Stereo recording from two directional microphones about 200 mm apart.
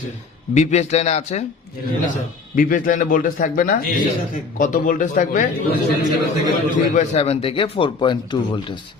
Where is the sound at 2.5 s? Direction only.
40° left (ahead or behind).